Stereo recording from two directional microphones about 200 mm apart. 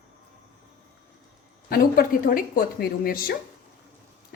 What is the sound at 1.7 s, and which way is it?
A woman's voice, 45° left (ahead or behind).